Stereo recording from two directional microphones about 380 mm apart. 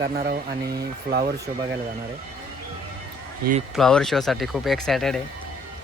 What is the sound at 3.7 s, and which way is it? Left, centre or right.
Speech, centre.